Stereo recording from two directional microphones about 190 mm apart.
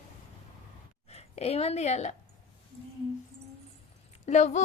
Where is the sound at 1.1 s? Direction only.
35° left (ahead or behind).